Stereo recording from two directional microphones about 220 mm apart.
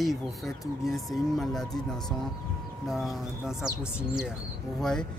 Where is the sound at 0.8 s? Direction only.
Centre (ahead or behind).